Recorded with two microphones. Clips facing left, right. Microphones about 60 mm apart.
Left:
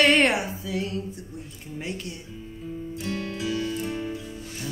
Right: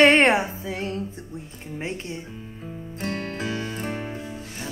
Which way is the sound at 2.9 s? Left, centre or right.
Right.